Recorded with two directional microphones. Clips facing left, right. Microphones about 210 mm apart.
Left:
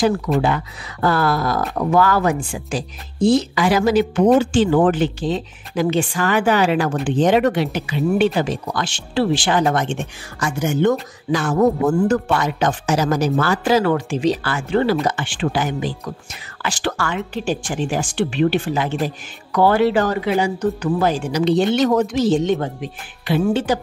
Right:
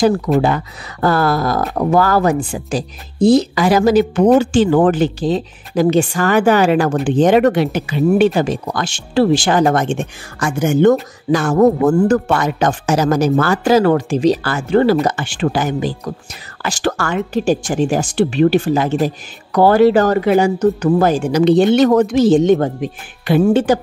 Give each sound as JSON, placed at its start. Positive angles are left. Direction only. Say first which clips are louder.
{"t": 1.0, "sound": "speech", "louder": "right 3 dB", "side_deg": -40}